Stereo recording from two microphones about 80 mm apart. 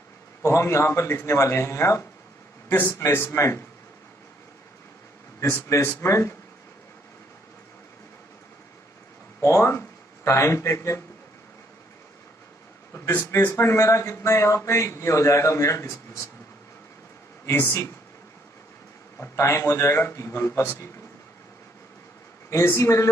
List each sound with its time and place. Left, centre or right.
0.4 s a man's voice: left
5.4 s a man's voice: left
9.4 s speech: left
12.9 s a sound: left
13.4 s a man's voice: left
19.1 s a man's voice: left
22.5 s a man's voice: left